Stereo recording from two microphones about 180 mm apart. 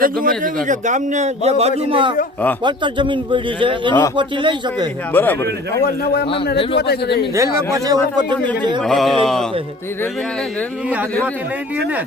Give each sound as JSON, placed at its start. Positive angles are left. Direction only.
{"t": 0.0, "sound": "a man's voice", "side_deg": -50}
{"t": 5.1, "sound": "a man's voice", "side_deg": 10}
{"t": 6.7, "sound": "speech", "side_deg": 65}
{"t": 7.3, "sound": "a man's voice", "side_deg": -15}
{"t": 8.8, "sound": "a sound", "side_deg": 0}